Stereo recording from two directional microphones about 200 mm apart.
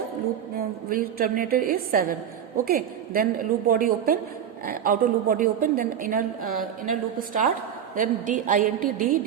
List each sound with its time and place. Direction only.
0.9 s a woman's voice: 45° right (ahead or behind)